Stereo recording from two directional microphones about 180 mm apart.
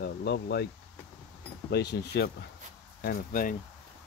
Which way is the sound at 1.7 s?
65° left (ahead or behind).